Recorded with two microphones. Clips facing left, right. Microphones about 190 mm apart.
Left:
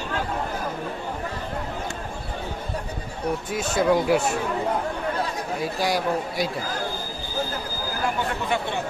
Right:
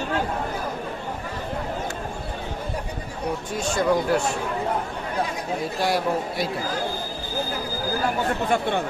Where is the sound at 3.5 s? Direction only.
5° left (ahead or behind).